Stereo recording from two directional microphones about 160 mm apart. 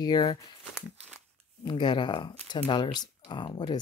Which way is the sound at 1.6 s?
30° left (ahead or behind).